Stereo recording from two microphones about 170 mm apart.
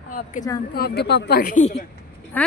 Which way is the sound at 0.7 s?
70° left (ahead or behind).